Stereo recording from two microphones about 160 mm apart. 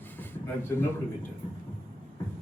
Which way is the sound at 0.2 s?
10° left (ahead or behind).